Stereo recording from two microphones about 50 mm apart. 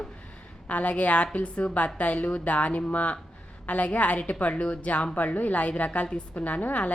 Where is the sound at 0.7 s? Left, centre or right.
Left.